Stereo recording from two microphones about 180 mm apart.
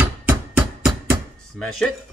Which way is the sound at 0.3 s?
5° right (ahead or behind).